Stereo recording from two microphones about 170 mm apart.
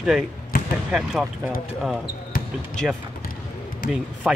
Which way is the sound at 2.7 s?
5° left (ahead or behind).